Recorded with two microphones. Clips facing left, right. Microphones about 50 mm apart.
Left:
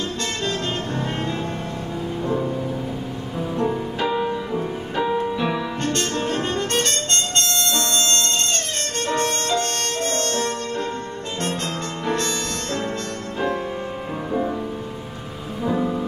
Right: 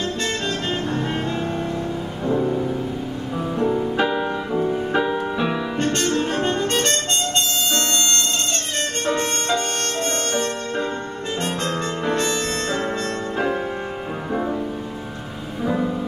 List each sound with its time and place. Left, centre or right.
3.5 s music: centre
9.0 s music: centre
11.6 s music: centre